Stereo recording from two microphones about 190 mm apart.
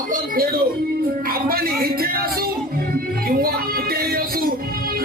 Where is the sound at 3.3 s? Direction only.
50° right (ahead or behind).